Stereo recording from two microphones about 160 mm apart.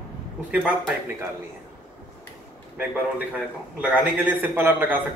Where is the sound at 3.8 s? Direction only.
10° right (ahead or behind).